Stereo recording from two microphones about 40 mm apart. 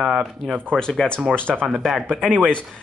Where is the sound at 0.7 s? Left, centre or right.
Centre.